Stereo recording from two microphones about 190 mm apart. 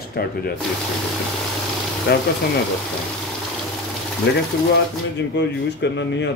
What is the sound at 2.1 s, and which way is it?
Speech, 55° left (ahead or behind).